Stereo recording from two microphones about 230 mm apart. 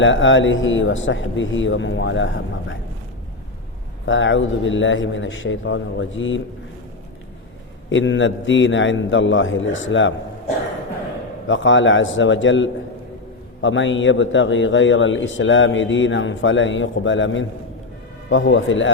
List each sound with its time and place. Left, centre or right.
0.0 s a man's voice: left
4.0 s a man's voice: left
7.9 s a man's voice: left
11.4 s a man's voice: left